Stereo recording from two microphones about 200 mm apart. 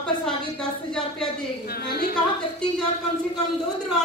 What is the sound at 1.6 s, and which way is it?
Speech, 50° left (ahead or behind).